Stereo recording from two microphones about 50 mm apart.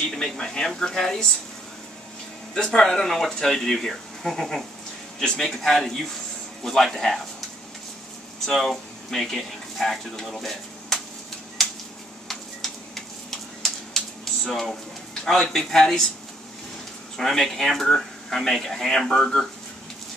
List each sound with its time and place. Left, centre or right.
0.1 s speech: centre
2.5 s speech: centre
8.5 s speech: centre
12.3 s a sound: centre
15.5 s speech: centre
17.2 s speech: centre